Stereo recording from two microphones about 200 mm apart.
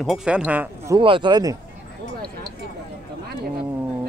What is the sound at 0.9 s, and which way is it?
Speech, 25° right (ahead or behind).